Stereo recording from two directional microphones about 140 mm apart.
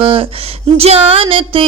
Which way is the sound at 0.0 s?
40° right (ahead or behind).